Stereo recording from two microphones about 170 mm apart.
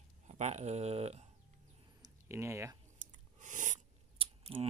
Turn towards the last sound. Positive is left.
turn(degrees=-35)  # may be behind; listen again after turning